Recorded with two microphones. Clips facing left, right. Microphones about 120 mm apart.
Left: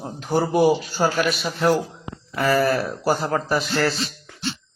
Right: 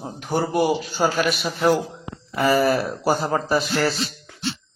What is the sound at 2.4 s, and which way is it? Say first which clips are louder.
Speech: right 1 dB; 15° right (ahead or behind).